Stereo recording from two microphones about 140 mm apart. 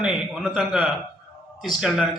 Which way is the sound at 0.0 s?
5° right (ahead or behind).